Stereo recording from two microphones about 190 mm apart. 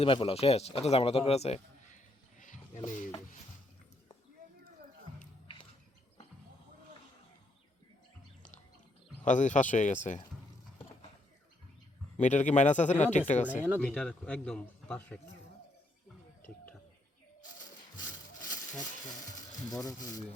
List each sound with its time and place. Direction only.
0.0 s speech: 30° left (ahead or behind)
9.2 s speech: 40° left (ahead or behind)
12.1 s speech: 40° left (ahead or behind)
13.8 s a man's voice: 5° left (ahead or behind)
18.4 s a sound: 20° left (ahead or behind)
19.7 s speech: 20° left (ahead or behind)